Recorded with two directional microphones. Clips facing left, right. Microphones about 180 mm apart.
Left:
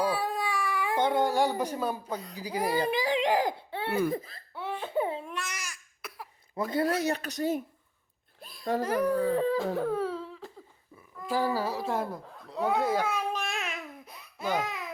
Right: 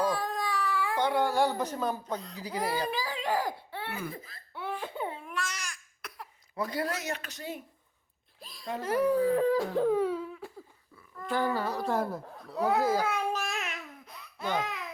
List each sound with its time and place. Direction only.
0.0 s speech: 10° left (ahead or behind); by 4.4 s 35° left (ahead or behind)
4.7 s crying: 25° left (ahead or behind); by 6.7 s 5° left (ahead or behind)
6.7 s speech: 25° left (ahead or behind)
8.4 s speech: centre (ahead or behind)
8.6 s speech: 40° left (ahead or behind)
9.0 s speech: 5° right (ahead or behind)
9.7 s a sound: 15° right (ahead or behind)
11.2 s a child's voice: 5° left (ahead or behind)
13.4 s a sound: 30° left (ahead or behind)
13.7 s laughter: 5° left (ahead or behind)